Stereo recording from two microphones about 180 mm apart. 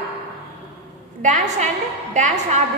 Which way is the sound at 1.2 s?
40° right (ahead or behind).